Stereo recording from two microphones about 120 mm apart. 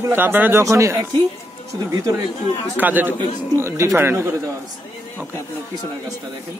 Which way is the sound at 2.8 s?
15° right (ahead or behind).